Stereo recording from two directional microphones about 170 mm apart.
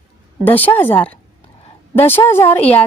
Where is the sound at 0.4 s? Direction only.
10° left (ahead or behind).